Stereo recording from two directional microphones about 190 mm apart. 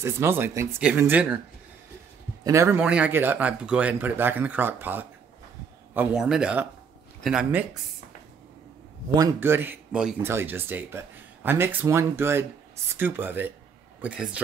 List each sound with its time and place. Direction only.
0.0 s speech: 10° right (ahead or behind)
2.4 s a man's voice: 15° right (ahead or behind)
9.1 s speech: 15° right (ahead or behind)